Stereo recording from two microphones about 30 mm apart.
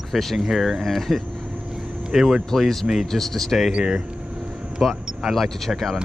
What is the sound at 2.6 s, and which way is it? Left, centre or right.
Speech, centre.